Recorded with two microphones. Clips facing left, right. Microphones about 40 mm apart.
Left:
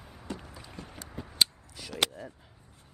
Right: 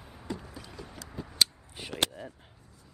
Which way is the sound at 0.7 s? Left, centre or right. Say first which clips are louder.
Even; left.